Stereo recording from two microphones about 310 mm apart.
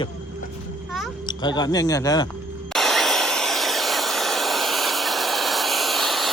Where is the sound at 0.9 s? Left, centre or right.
Centre.